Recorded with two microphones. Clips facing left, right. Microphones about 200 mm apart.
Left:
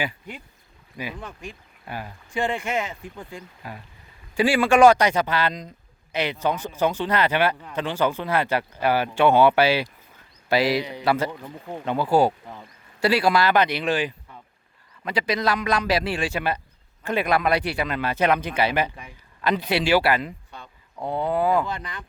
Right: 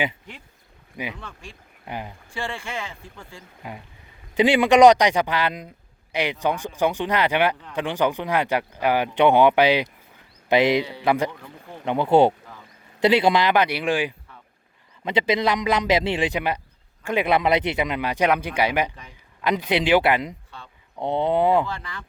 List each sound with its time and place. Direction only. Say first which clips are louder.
1.2 s speech: left 4 dB; 15° left (ahead or behind)
1.8 s a man's voice: right 2 dB; 20° right (ahead or behind)
2.3 s speech: left 6 dB; 20° left (ahead or behind)
3.6 s a man's voice: right 1 dB; 20° right (ahead or behind)
15.0 s a man's voice: right 3 dB; 25° right (ahead or behind)
21.7 s speech: left 1 dB; 20° left (ahead or behind)